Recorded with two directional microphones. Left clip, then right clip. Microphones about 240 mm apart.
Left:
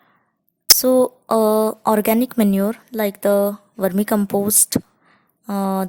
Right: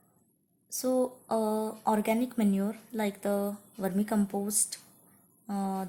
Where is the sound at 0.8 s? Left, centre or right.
Left.